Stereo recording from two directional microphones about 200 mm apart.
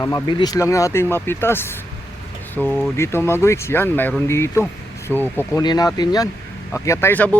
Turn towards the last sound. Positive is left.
turn(degrees=10)  # may be behind; listen again after turning